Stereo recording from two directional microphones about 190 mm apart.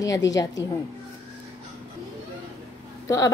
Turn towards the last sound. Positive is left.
turn(degrees=15)  # may be behind; listen again after turning